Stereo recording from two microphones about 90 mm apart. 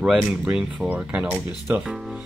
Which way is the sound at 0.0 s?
5° right (ahead or behind).